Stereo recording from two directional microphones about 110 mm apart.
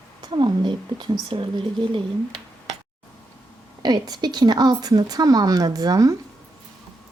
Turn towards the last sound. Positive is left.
turn(degrees=-35)  # may be behind; listen again after turning